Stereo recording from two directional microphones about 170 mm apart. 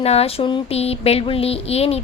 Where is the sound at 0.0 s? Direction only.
35° left (ahead or behind).